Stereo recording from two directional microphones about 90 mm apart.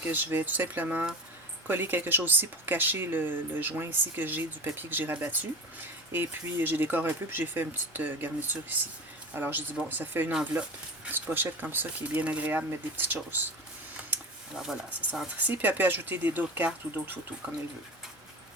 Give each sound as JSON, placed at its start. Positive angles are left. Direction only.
{"t": 0.1, "sound": "speech", "side_deg": -20}
{"t": 14.5, "sound": "speech", "side_deg": -5}
{"t": 15.4, "sound": "speech", "side_deg": -20}